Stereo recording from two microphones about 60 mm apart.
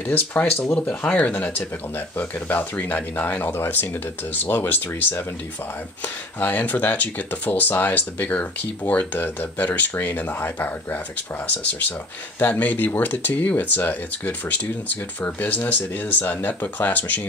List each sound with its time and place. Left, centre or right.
0.1 s speech: left
3.5 s speech: left
12.4 s speech: left